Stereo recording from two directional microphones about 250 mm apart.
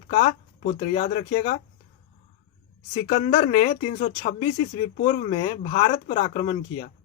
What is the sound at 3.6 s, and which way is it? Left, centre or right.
Speech, left.